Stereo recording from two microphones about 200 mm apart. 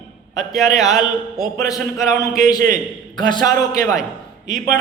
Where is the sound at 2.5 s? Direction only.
45° right (ahead or behind).